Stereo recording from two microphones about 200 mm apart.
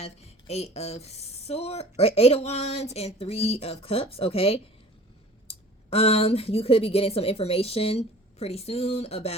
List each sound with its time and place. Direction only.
0.0 s a woman's voice: 30° left (ahead or behind)